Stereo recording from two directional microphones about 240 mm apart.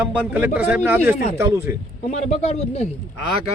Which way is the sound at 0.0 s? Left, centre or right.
Centre.